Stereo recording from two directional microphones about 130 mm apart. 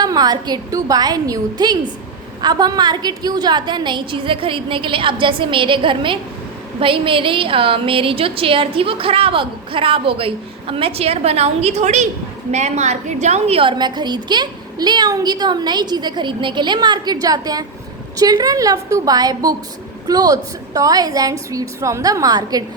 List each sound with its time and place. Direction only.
0.0 s a woman's voice: 30° right (ahead or behind)